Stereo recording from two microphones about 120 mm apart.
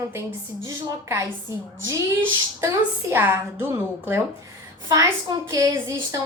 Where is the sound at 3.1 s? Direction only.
20° right (ahead or behind).